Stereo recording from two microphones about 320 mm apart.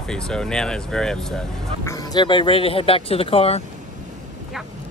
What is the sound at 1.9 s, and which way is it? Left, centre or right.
Speech, centre.